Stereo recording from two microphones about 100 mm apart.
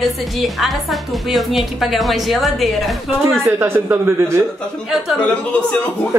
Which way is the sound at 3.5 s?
25° right (ahead or behind).